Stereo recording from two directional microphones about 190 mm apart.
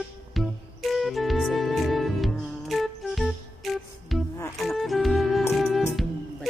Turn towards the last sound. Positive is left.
turn(degrees=0)  # may be behind; listen again after turning